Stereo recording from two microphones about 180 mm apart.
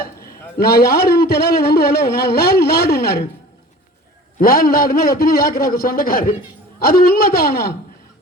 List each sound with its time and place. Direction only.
0.5 s a man's voice: 60° left (ahead or behind)
4.4 s a man's voice: 55° left (ahead or behind)